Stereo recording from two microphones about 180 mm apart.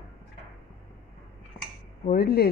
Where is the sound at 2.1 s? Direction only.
55° left (ahead or behind).